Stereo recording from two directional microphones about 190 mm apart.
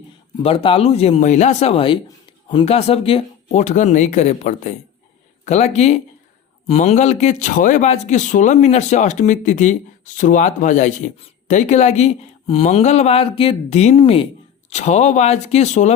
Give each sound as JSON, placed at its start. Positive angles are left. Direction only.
{"t": 0.4, "sound": "speech", "side_deg": 30}